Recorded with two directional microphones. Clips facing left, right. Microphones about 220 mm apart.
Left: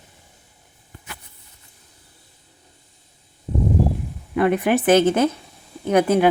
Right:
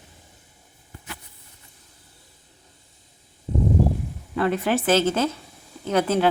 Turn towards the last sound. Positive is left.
turn(degrees=15)  # may be behind; listen again after turning